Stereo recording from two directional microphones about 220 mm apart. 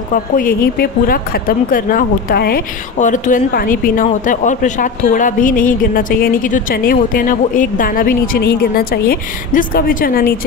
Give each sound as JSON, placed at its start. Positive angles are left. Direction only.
{"t": 0.1, "sound": "speech", "side_deg": 40}